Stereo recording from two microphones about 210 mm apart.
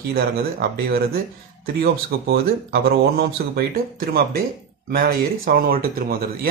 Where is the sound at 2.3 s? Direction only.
50° right (ahead or behind).